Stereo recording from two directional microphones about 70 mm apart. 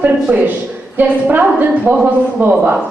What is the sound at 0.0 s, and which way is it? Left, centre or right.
A woman's voice, right.